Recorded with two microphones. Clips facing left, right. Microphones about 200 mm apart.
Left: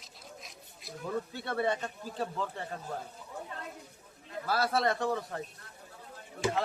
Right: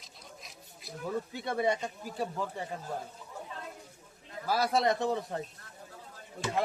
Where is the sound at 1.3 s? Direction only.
15° right (ahead or behind).